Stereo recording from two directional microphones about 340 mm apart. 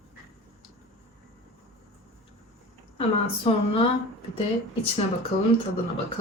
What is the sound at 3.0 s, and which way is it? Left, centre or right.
Speech, centre.